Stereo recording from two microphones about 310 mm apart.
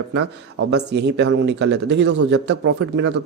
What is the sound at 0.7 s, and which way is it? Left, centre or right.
Speech, right.